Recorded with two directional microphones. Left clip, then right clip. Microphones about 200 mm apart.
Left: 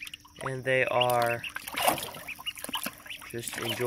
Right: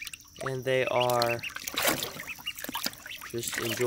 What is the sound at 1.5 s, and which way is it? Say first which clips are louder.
Boat: left 1 dB; 20° right (ahead or behind).